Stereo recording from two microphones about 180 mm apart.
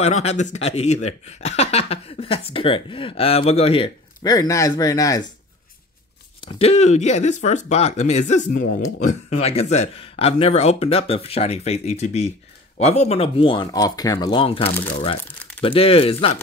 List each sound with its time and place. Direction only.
0.0 s speech: 35° left (ahead or behind); by 5.2 s 20° left (ahead or behind)
6.4 s speech: 35° left (ahead or behind)